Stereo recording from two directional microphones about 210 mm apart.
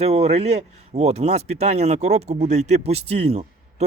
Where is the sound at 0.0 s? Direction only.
30° right (ahead or behind).